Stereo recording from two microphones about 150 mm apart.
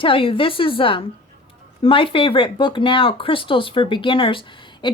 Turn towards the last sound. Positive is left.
turn(degrees=30)  # may be behind; listen again after turning